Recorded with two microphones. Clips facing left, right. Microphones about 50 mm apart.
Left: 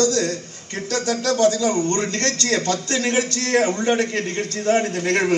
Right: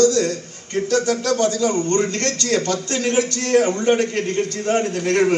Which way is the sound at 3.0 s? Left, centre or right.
Left.